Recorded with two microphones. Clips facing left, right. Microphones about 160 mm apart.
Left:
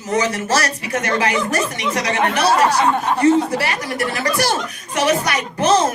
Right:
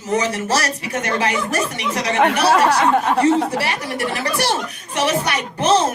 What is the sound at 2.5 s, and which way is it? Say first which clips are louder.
Speech: left 2 dB; 85° right.